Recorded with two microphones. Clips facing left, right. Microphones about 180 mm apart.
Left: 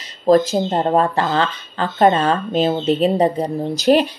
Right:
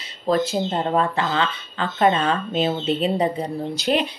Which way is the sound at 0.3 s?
40° left (ahead or behind).